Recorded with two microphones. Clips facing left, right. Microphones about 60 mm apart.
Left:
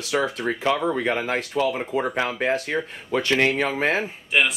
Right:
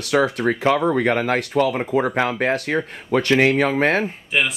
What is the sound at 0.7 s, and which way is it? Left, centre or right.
Speech, centre.